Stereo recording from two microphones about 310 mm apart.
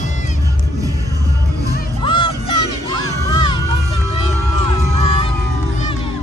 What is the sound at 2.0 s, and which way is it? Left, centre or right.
Music, centre.